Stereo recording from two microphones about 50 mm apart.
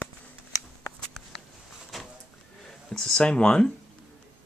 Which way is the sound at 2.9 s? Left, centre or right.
Centre.